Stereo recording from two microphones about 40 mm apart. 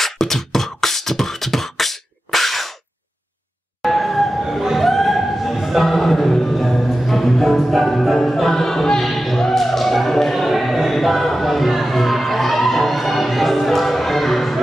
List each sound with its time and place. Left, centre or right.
0.0 s beatboxing: centre
3.8 s emergency vehicle: centre
4.7 s music: centre